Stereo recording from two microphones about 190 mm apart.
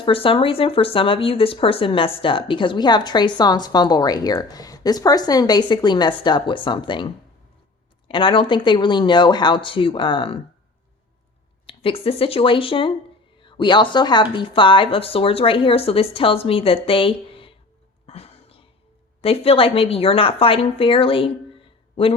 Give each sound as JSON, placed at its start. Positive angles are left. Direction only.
{"t": 0.0, "sound": "speech", "side_deg": 30}
{"t": 11.6, "sound": "speech", "side_deg": 30}
{"t": 18.0, "sound": "a sound", "side_deg": 30}
{"t": 19.2, "sound": "speech", "side_deg": 30}